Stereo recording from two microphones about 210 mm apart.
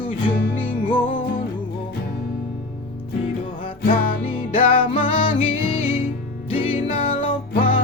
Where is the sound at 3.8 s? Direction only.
40° left (ahead or behind).